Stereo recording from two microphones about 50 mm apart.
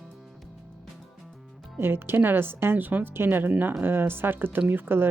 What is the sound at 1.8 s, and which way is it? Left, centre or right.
Speech, right.